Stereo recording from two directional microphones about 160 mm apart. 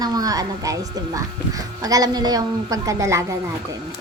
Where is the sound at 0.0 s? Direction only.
25° right (ahead or behind).